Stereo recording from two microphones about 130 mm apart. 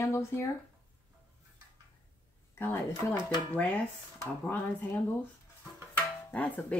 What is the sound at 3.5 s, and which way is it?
Speech, 10° left (ahead or behind).